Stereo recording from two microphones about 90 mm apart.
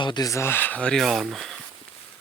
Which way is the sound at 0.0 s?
55° left (ahead or behind).